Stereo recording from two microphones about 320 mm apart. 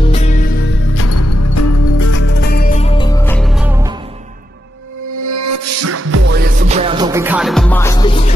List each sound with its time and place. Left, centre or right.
0.0 s music: centre
0.9 s music: left
2.0 s music: left; by 3.9 s centre
5.2 s music: right
6.7 s music: centre